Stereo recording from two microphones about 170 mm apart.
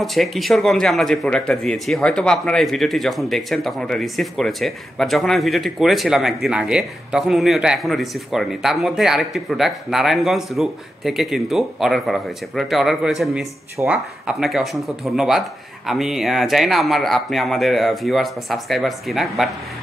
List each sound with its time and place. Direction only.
0.0 s a man's voice: centre (ahead or behind)